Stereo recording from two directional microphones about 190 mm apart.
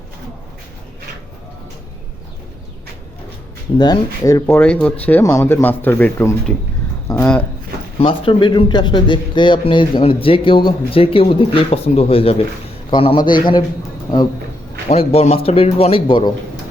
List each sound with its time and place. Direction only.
3.8 s speech: 20° left (ahead or behind)
7.9 s a man's voice: 30° left (ahead or behind)
14.8 s a man's voice: 35° left (ahead or behind)